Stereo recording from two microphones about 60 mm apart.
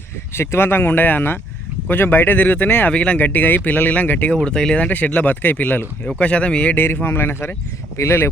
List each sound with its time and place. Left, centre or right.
0.3 s speech: left
2.9 s speech: centre
3.2 s speech: left
4.4 s speech: centre
4.9 s speech: left
6.1 s speech: centre
6.7 s speech: left